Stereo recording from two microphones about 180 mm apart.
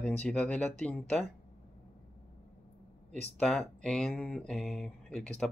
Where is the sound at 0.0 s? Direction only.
5° left (ahead or behind).